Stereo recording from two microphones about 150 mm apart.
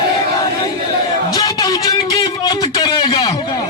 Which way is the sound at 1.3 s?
25° left (ahead or behind).